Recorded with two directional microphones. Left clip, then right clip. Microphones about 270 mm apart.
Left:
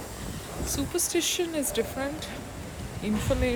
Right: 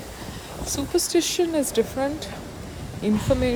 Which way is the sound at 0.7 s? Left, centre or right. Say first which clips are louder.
Right 6 dB; centre.